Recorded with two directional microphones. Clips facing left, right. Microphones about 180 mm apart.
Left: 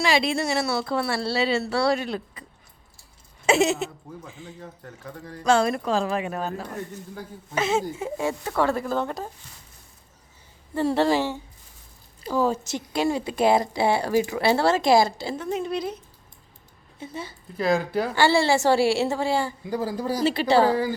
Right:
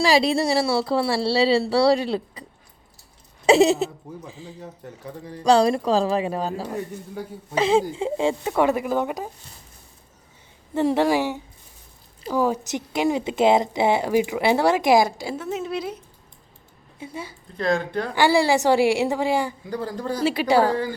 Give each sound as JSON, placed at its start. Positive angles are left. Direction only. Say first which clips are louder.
{"t": 0.0, "sound": "a woman's voice", "louder": "right 4 dB", "side_deg": -35}
{"t": 3.4, "sound": "a woman's voice", "louder": "right 5 dB", "side_deg": -35}
{"t": 4.6, "sound": "speech", "louder": "right 4 dB", "side_deg": -15}
{"t": 5.5, "sound": "a woman's voice", "louder": "right 4 dB", "side_deg": -35}
{"t": 7.9, "sound": "speech", "louder": "right 5 dB", "side_deg": -20}
{"t": 10.8, "sound": "speech", "louder": "right 2 dB", "side_deg": -15}
{"t": 17.0, "sound": "speech", "louder": "right 1 dB", "side_deg": -10}
{"t": 17.6, "sound": "speech", "louder": "left 1 dB", "side_deg": 5}
{"t": 18.1, "sound": "speech", "louder": "right 2 dB", "side_deg": -15}
{"t": 19.7, "sound": "speech", "louder": "left 2 dB", "side_deg": 10}
{"t": 20.2, "sound": "speech", "louder": "right 1 dB", "side_deg": -10}
{"t": 20.7, "sound": "speech", "louder": "left 1 dB", "side_deg": 10}